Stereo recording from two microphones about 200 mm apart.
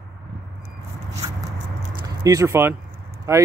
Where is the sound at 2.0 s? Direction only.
15° right (ahead or behind).